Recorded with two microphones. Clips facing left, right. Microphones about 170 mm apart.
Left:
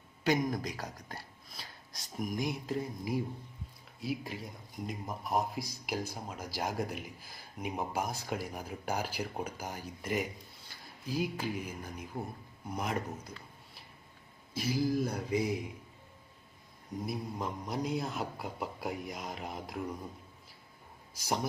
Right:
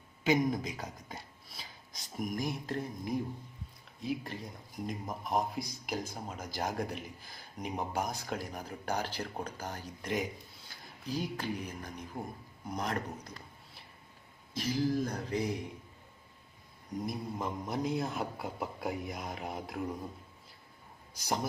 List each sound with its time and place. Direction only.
0.3 s a man's voice: centre (ahead or behind)
4.0 s a sound: 5° left (ahead or behind)
4.9 s a man's voice: 5° left (ahead or behind)
14.5 s a sound: 10° left (ahead or behind)
17.0 s a man's voice: centre (ahead or behind)
21.2 s a man's voice: centre (ahead or behind)